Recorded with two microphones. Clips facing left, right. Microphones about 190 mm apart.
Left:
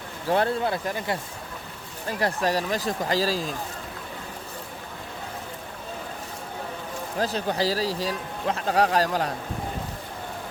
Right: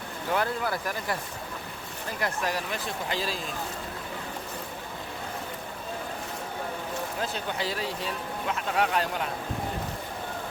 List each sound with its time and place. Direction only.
0.3 s speech: 30° left (ahead or behind)
2.1 s speech: 35° left (ahead or behind)
7.2 s speech: 35° left (ahead or behind)